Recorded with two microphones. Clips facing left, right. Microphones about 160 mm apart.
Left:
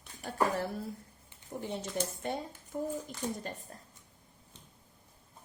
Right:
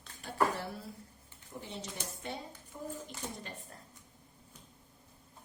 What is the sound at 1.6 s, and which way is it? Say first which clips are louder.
A woman's voice: left 8 dB; 50° left (ahead or behind).